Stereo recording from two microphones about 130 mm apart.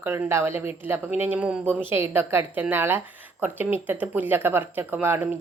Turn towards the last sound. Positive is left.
turn(degrees=-15)  # may be behind; listen again after turning